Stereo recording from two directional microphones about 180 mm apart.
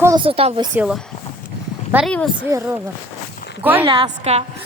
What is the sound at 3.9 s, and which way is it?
Speech, 30° right (ahead or behind).